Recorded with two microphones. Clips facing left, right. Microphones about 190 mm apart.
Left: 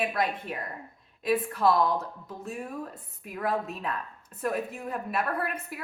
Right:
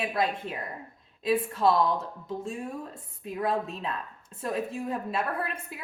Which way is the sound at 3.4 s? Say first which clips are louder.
Even; 25° right (ahead or behind).